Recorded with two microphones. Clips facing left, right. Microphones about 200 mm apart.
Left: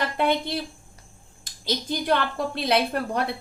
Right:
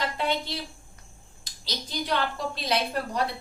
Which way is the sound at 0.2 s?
55° left (ahead or behind).